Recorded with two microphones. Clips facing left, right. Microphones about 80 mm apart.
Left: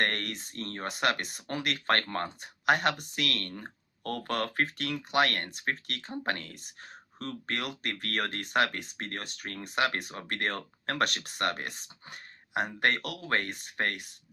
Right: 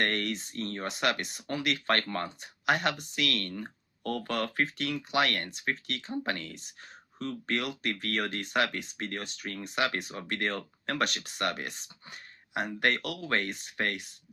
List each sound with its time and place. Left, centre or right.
0.0 s speech: left